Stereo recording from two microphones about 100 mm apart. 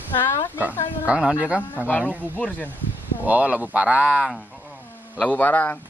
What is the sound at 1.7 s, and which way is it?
Speech, 15° left (ahead or behind).